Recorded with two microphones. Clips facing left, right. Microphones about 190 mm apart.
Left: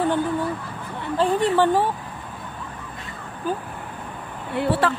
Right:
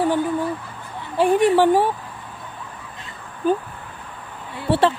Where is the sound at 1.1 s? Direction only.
15° right (ahead or behind).